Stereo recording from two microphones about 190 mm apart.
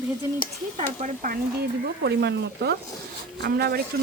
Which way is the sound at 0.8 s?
40° right (ahead or behind).